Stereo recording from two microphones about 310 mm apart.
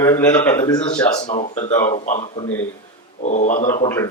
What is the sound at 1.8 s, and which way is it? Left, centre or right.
Speech, left.